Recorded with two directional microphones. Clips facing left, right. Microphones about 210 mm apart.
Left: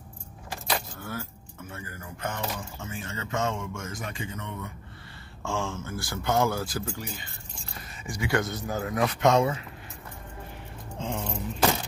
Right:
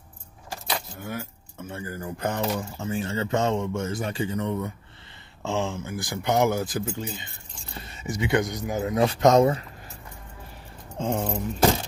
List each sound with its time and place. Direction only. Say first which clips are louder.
0.9 s keys jangling: right 3 dB; 15° right (ahead or behind)
1.7 s speech: right 8 dB; 30° right (ahead or behind)
5.4 s speech: right 4 dB; 20° right (ahead or behind); by 9.7 s 40° right (ahead or behind)
11.0 s speech: right 6 dB; 45° right (ahead or behind)